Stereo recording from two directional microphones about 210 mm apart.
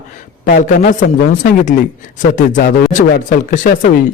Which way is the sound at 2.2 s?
40° left (ahead or behind).